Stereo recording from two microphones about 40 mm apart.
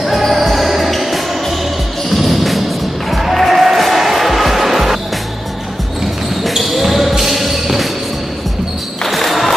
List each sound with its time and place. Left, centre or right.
0.0 s music: centre
6.4 s basketball bounce: centre
9.0 s a sound: centre